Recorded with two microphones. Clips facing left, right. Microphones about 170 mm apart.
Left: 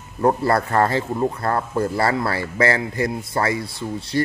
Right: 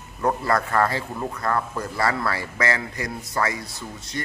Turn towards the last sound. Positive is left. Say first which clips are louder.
# left 9 dB
turn(degrees=30)  # may be behind; listen again after turning